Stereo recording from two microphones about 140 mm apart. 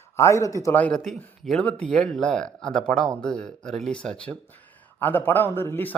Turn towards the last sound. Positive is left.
turn(degrees=15)  # may be behind; listen again after turning